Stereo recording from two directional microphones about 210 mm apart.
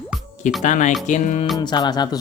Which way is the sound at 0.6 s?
35° left (ahead or behind).